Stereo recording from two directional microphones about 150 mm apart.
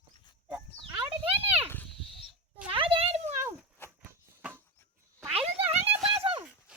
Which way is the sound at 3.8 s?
15° left (ahead or behind).